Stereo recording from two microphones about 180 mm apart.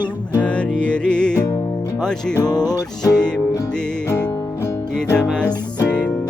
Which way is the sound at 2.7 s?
20° left (ahead or behind).